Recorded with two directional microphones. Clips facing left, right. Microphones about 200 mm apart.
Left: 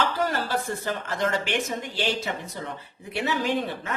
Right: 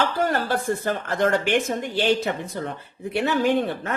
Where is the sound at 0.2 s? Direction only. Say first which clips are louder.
Right 3 dB; 55° right (ahead or behind).